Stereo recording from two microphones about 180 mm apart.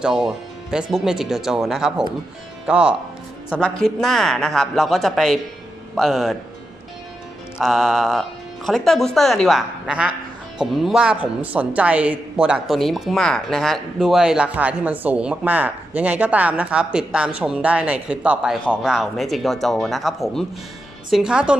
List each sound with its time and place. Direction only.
0.0 s speech: 5° right (ahead or behind)
7.6 s speech: centre (ahead or behind)